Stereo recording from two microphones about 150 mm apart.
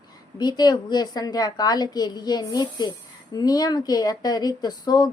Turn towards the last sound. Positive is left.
turn(degrees=25)  # may be behind; listen again after turning